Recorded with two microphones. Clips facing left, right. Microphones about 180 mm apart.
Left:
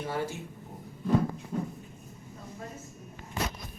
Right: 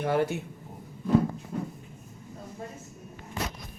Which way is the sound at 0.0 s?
65° right (ahead or behind).